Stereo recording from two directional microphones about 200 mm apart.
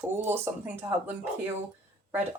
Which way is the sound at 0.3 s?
10° right (ahead or behind).